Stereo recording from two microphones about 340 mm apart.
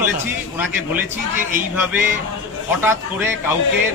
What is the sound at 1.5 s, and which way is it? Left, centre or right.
A man's voice, centre.